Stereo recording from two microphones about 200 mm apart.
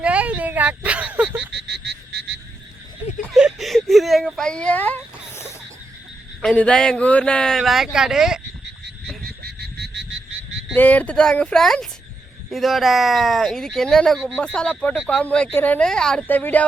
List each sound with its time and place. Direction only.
0.0 s a sound: 5° right (ahead or behind)
1.5 s frog: 60° right (ahead or behind)
3.3 s speech: centre (ahead or behind)
6.4 s speech: 5° left (ahead or behind)
9.4 s frog: 55° right (ahead or behind)
10.8 s speech: 10° left (ahead or behind)